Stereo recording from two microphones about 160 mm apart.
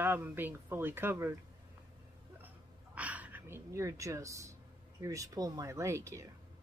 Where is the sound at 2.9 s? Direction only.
10° right (ahead or behind).